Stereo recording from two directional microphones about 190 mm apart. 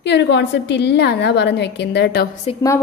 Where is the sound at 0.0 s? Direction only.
65° left (ahead or behind).